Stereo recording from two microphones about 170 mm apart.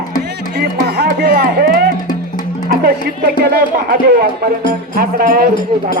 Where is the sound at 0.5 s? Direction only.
75° right (ahead or behind).